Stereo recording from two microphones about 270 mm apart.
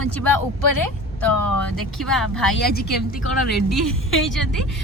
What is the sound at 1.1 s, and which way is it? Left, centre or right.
A woman's voice, centre.